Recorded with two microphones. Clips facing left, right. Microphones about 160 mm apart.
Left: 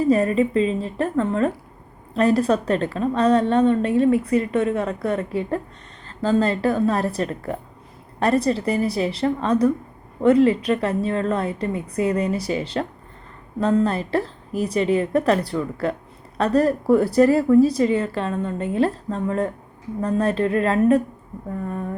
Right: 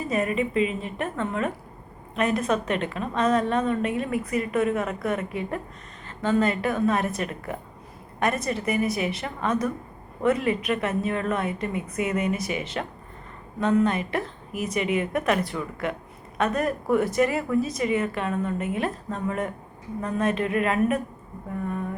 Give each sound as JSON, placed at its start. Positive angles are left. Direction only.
{"t": 0.0, "sound": "a woman's voice", "side_deg": 35}